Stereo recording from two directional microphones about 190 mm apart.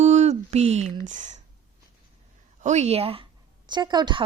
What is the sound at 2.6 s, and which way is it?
Speech, 35° right (ahead or behind).